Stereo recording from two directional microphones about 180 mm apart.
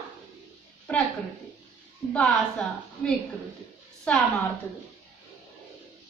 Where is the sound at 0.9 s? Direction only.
5° left (ahead or behind).